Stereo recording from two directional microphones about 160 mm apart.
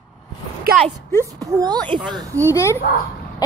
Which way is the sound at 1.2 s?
25° right (ahead or behind).